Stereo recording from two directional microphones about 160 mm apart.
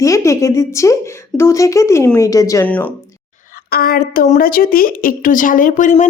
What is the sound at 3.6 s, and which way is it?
A woman's voice, 70° left (ahead or behind).